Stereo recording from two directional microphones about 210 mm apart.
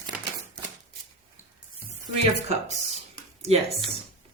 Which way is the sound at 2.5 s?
30° right (ahead or behind).